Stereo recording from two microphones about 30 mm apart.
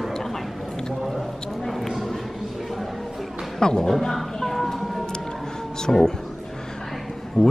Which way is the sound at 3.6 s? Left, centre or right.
Left.